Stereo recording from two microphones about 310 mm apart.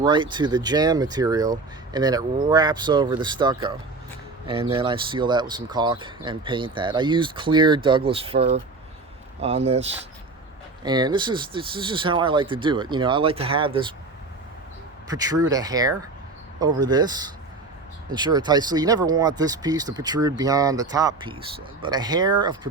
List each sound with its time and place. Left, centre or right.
0.0 s speech: centre
10.8 s speech: centre
15.0 s speech: centre